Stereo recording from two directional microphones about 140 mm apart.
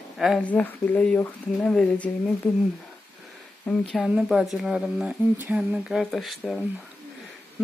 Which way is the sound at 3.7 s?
Centre (ahead or behind).